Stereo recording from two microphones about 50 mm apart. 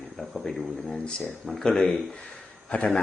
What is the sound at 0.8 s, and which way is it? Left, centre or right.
Speech, centre.